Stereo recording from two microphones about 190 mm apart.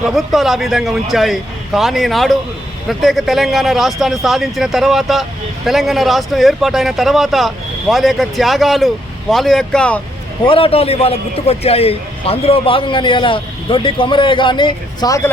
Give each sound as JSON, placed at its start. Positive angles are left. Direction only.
{"t": 0.0, "sound": "speech", "side_deg": 0}
{"t": 10.4, "sound": "a man's voice", "side_deg": 30}